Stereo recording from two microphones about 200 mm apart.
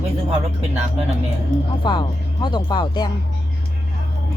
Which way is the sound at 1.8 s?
20° left (ahead or behind).